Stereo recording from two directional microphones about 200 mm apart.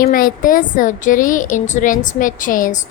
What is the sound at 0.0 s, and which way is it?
A woman's voice, 45° left (ahead or behind).